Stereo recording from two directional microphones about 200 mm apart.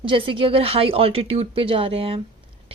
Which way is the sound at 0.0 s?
25° right (ahead or behind).